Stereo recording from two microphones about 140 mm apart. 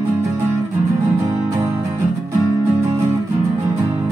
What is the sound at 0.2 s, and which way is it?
Music, 20° right (ahead or behind).